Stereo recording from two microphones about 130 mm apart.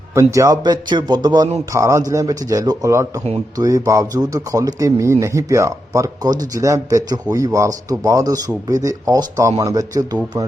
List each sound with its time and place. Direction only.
0.1 s a man's voice: 25° right (ahead or behind)